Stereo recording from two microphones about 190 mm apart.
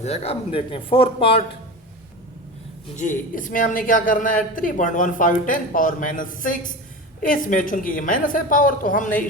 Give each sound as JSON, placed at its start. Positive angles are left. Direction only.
{"t": 0.0, "sound": "speech", "side_deg": 35}
{"t": 2.9, "sound": "speech", "side_deg": 40}